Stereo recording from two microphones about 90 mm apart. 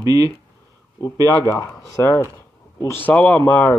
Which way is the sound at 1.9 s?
35° left (ahead or behind).